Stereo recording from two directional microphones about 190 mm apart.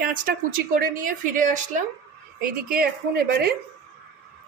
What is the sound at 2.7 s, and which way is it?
Speech, 55° right (ahead or behind).